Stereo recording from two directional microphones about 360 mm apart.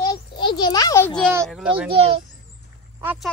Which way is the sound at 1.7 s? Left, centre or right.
Centre.